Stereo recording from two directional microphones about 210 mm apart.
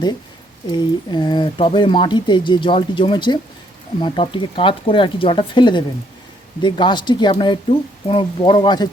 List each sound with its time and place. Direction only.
0.7 s speech: 20° left (ahead or behind)